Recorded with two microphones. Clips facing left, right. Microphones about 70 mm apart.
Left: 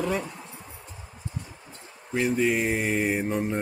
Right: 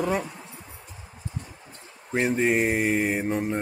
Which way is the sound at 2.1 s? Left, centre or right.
Right.